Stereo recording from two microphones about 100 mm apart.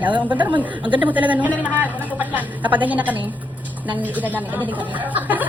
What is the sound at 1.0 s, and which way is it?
Speech, 15° right (ahead or behind).